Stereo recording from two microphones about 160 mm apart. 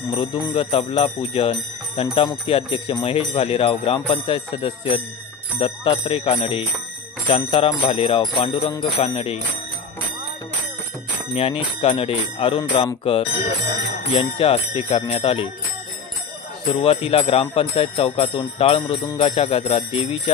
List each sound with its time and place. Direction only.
0.1 s speech: 35° left (ahead or behind)
7.2 s jingle bell: 30° left (ahead or behind)
7.9 s speech: 35° left (ahead or behind)
11.3 s speech: 35° left (ahead or behind)
16.8 s speech: 40° left (ahead or behind)